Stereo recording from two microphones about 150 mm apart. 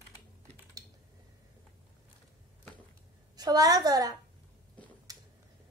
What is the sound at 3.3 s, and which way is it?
Speech, 25° right (ahead or behind).